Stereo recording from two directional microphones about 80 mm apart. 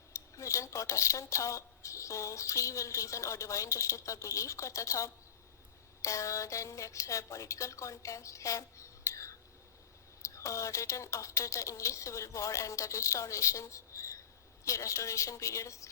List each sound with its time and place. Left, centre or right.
0.1 s speech: left